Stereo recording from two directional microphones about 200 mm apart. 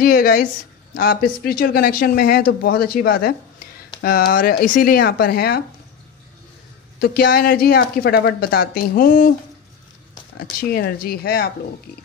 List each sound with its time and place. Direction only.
0.0 s speech: 45° left (ahead or behind)
7.0 s speech: 50° left (ahead or behind)
10.6 s speech: 50° left (ahead or behind)